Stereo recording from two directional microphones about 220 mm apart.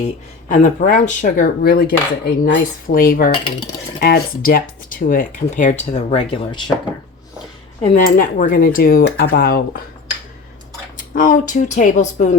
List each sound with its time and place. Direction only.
0.4 s speech: 35° left (ahead or behind)
7.8 s speech: 35° left (ahead or behind)
10.9 s speech: 35° left (ahead or behind)